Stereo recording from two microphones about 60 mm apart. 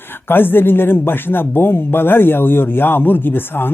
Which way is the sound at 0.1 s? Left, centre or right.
Left.